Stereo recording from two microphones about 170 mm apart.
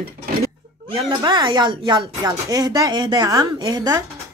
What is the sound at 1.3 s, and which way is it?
Speech, 30° right (ahead or behind).